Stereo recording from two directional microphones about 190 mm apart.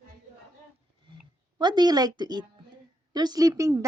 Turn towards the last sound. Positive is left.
turn(degrees=-15)  # may be behind; listen again after turning